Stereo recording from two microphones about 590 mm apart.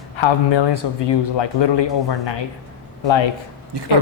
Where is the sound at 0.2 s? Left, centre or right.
Left.